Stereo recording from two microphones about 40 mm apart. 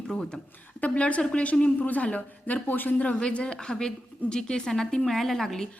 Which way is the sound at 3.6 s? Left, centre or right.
Centre.